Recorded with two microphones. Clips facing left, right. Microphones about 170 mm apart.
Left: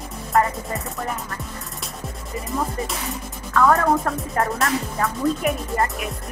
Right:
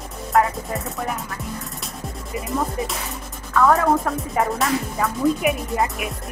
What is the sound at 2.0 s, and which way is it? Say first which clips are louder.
Speech: right 2 dB; centre (ahead or behind).